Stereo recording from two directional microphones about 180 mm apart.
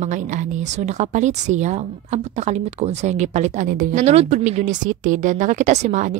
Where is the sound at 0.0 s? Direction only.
45° right (ahead or behind).